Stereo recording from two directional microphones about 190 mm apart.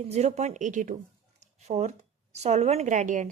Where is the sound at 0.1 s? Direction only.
35° right (ahead or behind).